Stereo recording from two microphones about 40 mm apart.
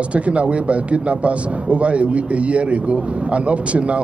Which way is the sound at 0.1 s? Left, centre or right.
Right.